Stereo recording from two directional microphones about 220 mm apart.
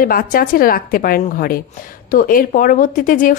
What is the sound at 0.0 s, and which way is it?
Speech, 40° left (ahead or behind).